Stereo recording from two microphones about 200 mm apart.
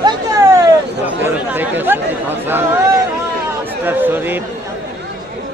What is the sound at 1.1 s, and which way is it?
Chatter, 10° right (ahead or behind).